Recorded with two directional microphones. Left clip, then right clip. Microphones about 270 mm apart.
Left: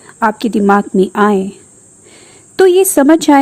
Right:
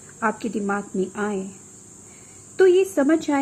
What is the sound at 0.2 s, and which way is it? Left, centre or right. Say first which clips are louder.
Speech: left 11 dB; left.